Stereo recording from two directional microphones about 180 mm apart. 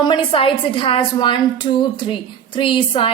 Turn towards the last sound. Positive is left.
turn(degrees=30)  # may be behind; listen again after turning